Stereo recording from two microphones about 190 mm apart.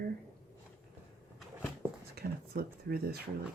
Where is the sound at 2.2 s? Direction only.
50° right (ahead or behind).